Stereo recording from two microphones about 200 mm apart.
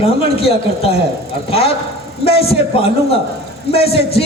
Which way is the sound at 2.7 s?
30° left (ahead or behind).